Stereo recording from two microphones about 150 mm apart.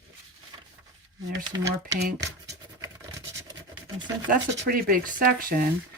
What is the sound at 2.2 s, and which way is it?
Scratch, 20° right (ahead or behind).